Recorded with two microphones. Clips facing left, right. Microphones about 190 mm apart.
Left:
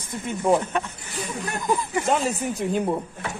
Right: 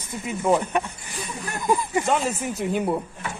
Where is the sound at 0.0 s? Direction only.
5° right (ahead or behind).